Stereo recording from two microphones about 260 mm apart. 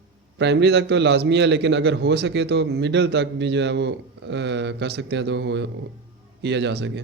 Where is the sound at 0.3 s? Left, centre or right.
Right.